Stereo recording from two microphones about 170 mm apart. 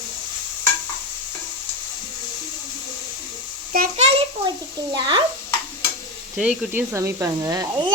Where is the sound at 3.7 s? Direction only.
60° right (ahead or behind).